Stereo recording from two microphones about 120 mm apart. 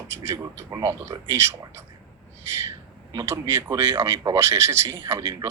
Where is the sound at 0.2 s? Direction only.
20° right (ahead or behind).